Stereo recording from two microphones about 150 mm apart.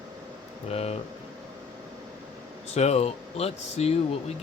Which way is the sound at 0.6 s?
40° left (ahead or behind).